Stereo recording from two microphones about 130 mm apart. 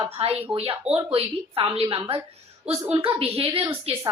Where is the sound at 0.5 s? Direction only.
45° right (ahead or behind).